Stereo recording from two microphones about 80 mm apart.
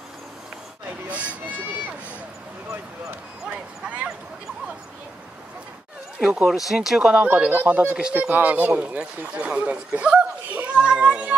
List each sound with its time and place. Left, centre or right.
1.1 s speech: centre
3.8 s speech: centre
6.1 s speech: centre